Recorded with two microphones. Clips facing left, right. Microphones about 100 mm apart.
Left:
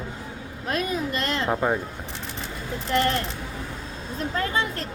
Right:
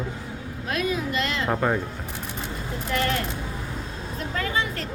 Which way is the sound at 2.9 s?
35° left (ahead or behind).